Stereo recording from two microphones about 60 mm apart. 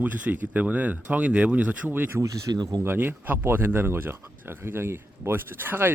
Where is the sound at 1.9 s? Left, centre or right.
Right.